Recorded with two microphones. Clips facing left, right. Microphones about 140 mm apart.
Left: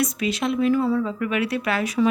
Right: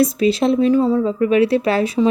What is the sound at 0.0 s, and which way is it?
A woman's voice, 30° right (ahead or behind).